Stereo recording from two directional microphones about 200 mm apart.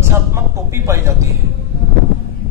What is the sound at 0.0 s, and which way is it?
A man's voice, 15° right (ahead or behind).